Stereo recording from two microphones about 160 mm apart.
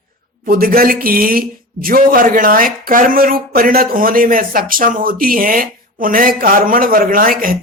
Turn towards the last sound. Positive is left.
turn(degrees=-60)  # may be behind; listen again after turning